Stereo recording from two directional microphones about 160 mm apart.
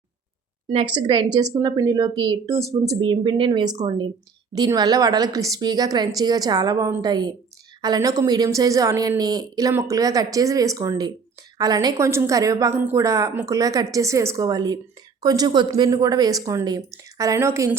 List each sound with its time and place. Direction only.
0.7 s speech: 35° right (ahead or behind); by 17.7 s 15° right (ahead or behind)